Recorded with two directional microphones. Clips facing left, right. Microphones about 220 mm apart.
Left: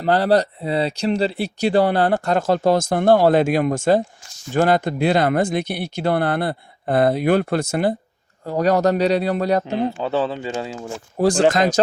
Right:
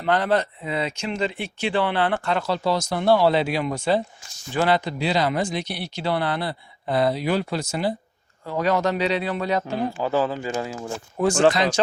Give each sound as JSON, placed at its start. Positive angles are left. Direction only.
{"t": 0.0, "sound": "speech", "side_deg": 35}
{"t": 8.4, "sound": "speech", "side_deg": 40}
{"t": 9.6, "sound": "speech", "side_deg": 20}
{"t": 11.2, "sound": "speech", "side_deg": 35}